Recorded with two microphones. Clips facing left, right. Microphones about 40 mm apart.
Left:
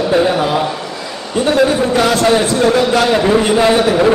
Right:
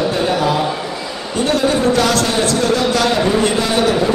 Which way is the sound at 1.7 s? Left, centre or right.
Centre.